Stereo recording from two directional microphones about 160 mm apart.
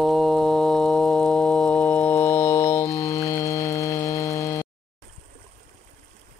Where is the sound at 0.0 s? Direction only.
Centre (ahead or behind); by 4.6 s 20° left (ahead or behind).